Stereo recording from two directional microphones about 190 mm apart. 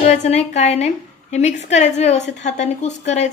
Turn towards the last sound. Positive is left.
turn(degrees=35)  # may be behind; listen again after turning